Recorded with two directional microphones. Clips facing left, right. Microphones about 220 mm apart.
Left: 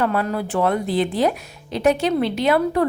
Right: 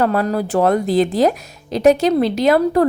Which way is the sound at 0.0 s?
40° right (ahead or behind).